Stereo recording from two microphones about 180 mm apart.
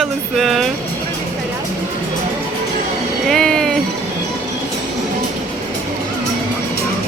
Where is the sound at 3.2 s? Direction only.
5° left (ahead or behind).